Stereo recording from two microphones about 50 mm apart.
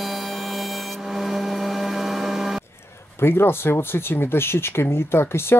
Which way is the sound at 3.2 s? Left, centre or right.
Left.